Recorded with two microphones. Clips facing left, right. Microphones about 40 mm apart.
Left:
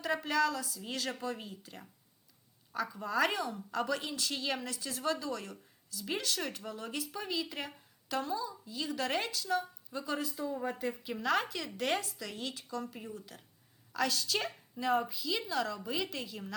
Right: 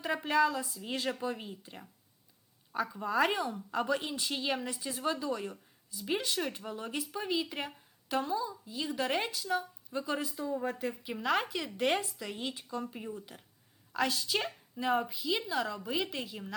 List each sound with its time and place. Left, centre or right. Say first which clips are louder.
0.0 s a woman's voice: right 2 dB; centre
2.8 s a woman's voice: right 2 dB; centre